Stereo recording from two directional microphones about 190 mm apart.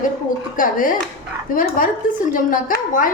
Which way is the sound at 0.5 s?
45° left (ahead or behind).